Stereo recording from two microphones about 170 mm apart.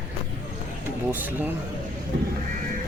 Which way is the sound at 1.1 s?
10° right (ahead or behind).